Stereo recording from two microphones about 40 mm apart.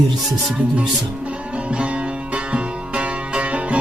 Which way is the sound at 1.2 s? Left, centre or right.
Right.